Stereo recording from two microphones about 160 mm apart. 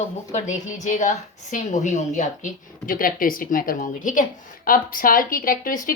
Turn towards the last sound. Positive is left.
turn(degrees=60)  # may be behind; listen again after turning